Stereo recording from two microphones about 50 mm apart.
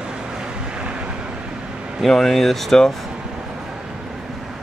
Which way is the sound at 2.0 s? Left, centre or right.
Centre.